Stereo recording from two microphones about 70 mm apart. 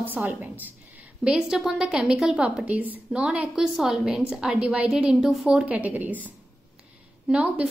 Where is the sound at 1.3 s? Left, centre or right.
Centre; by 6.3 s right.